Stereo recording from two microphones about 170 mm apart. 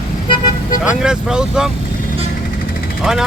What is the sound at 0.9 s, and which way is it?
Speech, 5° right (ahead or behind).